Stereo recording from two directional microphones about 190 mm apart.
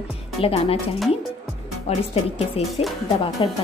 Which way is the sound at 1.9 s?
30° left (ahead or behind).